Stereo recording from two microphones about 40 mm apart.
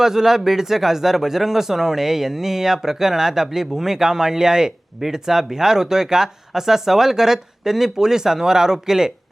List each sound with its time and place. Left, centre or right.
0.0 s speech: centre